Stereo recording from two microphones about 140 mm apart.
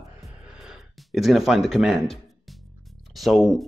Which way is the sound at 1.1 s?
Centre (ahead or behind).